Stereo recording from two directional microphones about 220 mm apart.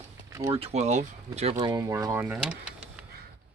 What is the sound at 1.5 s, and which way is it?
Speech, 15° right (ahead or behind).